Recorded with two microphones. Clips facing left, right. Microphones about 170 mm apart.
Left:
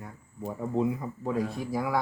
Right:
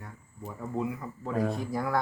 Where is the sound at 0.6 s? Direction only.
20° left (ahead or behind).